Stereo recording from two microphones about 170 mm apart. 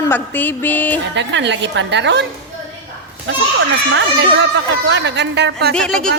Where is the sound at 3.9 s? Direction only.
90° right.